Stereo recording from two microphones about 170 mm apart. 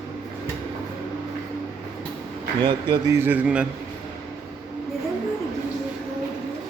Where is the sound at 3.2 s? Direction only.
10° right (ahead or behind).